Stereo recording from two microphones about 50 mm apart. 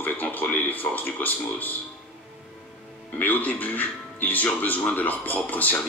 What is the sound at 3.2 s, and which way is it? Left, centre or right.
Speech, left.